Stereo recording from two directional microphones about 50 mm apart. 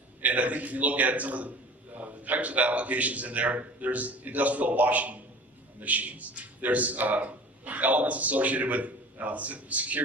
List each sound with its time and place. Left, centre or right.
0.2 s a man's voice: right